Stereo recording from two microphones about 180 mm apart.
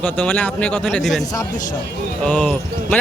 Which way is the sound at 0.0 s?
10° left (ahead or behind).